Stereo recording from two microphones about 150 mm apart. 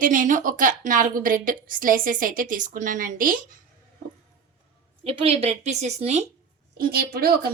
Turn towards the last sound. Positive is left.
turn(degrees=-85)